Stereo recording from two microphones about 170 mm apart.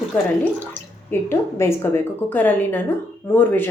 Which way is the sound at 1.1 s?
15° left (ahead or behind).